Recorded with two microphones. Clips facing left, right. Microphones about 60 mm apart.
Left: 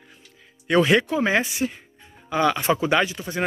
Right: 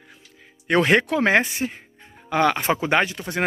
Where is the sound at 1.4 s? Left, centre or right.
Right.